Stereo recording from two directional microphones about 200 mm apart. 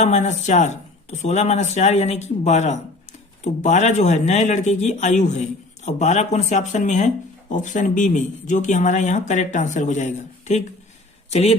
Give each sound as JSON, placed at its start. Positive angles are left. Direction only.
{"t": 0.0, "sound": "speech", "side_deg": 35}